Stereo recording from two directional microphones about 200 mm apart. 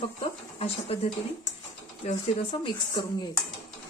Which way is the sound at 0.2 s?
30° left (ahead or behind).